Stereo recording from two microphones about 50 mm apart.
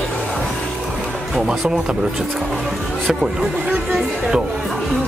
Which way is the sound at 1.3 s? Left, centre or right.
Centre.